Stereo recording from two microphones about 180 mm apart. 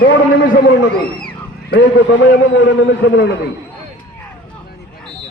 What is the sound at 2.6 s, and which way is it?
Speech, 85° left.